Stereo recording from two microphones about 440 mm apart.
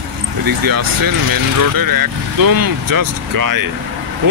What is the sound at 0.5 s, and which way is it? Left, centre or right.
Speech, right.